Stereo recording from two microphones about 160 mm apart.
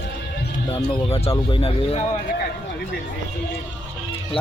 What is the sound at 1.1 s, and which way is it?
Speech, 40° left (ahead or behind).